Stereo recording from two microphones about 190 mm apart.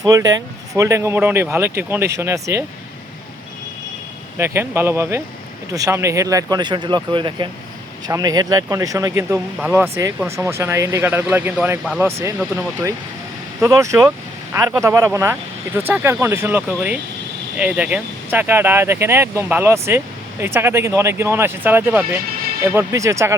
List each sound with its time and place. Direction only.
0.0 s speech: 20° right (ahead or behind)
4.4 s speech: 15° right (ahead or behind)
13.6 s speech: 15° right (ahead or behind)